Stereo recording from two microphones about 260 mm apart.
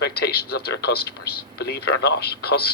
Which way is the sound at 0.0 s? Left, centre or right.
Left.